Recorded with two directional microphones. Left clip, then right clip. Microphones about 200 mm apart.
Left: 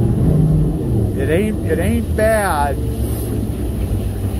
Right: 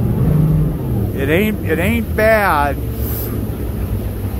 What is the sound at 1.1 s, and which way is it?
Speech, 30° right (ahead or behind).